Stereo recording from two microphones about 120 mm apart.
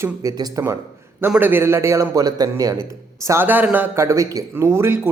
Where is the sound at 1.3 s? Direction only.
15° right (ahead or behind); by 2.7 s 30° right (ahead or behind).